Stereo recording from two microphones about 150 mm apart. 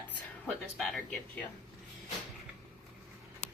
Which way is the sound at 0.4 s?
Centre (ahead or behind).